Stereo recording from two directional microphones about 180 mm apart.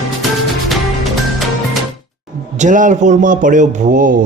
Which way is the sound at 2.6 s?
45° right (ahead or behind).